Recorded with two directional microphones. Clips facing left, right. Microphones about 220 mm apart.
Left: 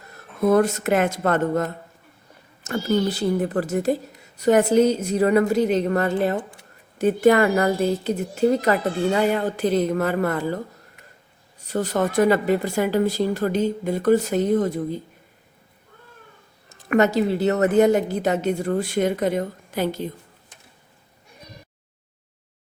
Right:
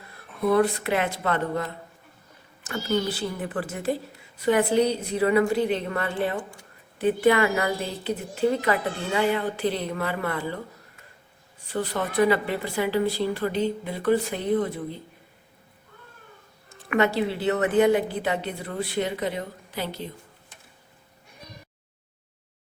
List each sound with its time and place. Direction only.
0.1 s a woman's voice: 45° left (ahead or behind)
11.6 s speech: 45° left (ahead or behind)
16.6 s speech: 40° left (ahead or behind)